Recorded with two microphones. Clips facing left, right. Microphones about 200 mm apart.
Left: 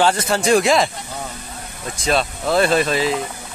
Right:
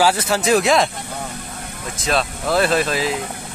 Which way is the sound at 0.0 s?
5° right (ahead or behind).